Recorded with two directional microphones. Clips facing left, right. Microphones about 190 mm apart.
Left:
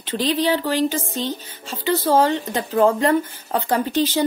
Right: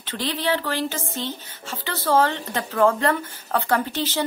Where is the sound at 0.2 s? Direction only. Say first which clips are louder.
Left 4 dB; 15° left (ahead or behind).